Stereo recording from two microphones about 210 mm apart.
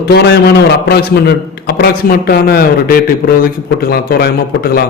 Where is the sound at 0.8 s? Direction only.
50° left (ahead or behind).